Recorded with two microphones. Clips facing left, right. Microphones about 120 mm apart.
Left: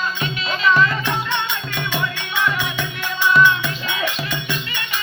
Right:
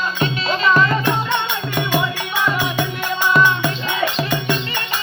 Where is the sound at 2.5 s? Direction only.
40° right (ahead or behind).